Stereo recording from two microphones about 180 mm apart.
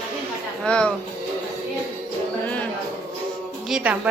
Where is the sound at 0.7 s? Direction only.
5° left (ahead or behind).